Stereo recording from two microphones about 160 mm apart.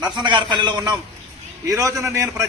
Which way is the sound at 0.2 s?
30° right (ahead or behind).